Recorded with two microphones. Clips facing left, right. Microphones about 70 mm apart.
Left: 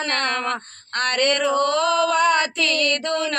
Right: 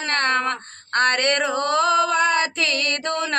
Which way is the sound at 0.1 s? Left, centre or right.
Right.